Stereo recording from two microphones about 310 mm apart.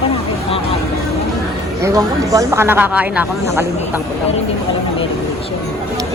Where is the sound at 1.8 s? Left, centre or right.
Centre.